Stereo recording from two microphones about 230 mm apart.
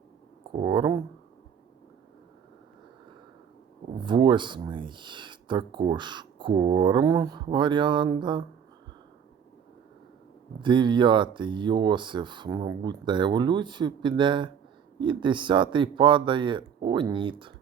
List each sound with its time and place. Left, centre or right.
0.5 s speech: centre
4.0 s speech: centre
10.6 s speech: centre